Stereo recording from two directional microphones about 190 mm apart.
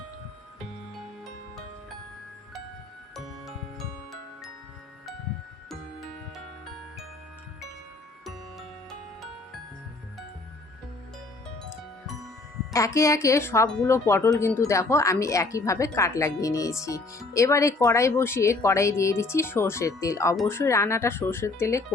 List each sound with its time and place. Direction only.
3.2 s music: centre (ahead or behind)
8.2 s music: centre (ahead or behind)
12.7 s speech: 15° left (ahead or behind)